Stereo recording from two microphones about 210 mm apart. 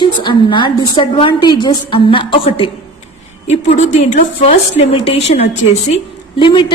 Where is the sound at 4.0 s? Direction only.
30° left (ahead or behind).